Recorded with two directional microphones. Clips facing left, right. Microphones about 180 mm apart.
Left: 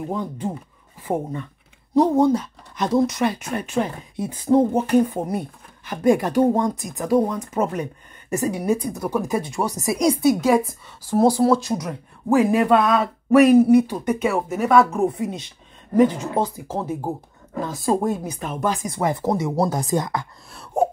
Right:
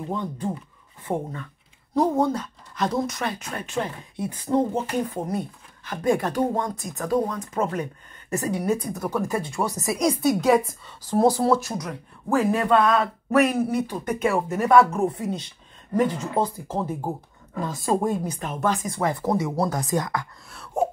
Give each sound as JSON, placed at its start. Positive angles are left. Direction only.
{"t": 0.0, "sound": "speech", "side_deg": 10}